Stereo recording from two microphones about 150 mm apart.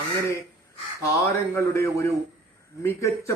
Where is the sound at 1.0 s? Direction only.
20° left (ahead or behind).